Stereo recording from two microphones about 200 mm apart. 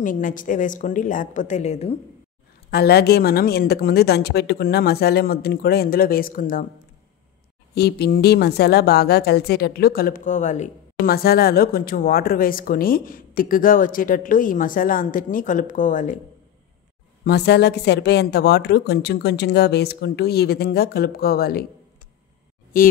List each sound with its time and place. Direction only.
0.0 s a woman's voice: 40° left (ahead or behind)
2.7 s speech: 55° left (ahead or behind)
7.7 s speech: 55° left (ahead or behind); by 11.1 s 35° left (ahead or behind)
11.1 s speech: 50° left (ahead or behind)
17.2 s a woman's voice: 55° left (ahead or behind)
22.7 s speech: 45° left (ahead or behind)